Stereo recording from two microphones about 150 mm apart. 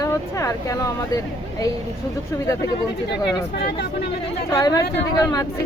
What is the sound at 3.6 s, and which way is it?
Speech, 90° left.